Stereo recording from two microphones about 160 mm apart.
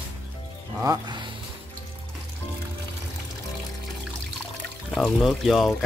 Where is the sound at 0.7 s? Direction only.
20° right (ahead or behind).